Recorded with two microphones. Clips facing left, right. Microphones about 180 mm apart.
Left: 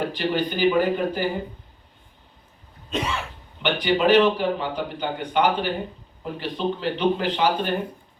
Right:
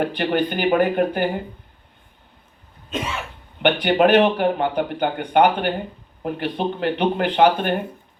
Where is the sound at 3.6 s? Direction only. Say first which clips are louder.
Right 4 dB; 55° right (ahead or behind).